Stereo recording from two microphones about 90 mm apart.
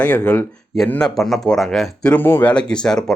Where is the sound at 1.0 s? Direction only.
5° left (ahead or behind).